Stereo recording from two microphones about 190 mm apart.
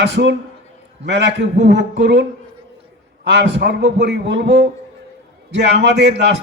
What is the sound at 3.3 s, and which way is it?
A man's voice, 65° right (ahead or behind).